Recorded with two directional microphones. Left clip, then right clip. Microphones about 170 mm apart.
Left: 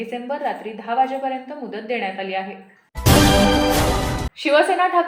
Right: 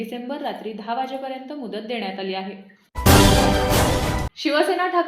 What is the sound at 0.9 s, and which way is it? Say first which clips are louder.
A woman's voice: left 7 dB; 40° right (ahead or behind).